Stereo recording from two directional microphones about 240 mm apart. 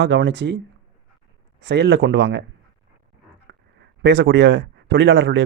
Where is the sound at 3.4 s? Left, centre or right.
Right.